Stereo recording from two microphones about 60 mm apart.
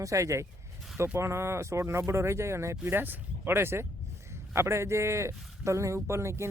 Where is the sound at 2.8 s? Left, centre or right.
Right.